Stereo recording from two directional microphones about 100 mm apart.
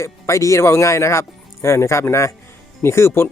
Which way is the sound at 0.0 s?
30° left (ahead or behind).